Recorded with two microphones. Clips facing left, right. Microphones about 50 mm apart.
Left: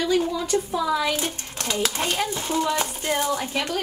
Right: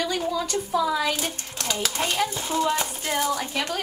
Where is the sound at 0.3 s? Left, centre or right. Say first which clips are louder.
Left 1 dB; left.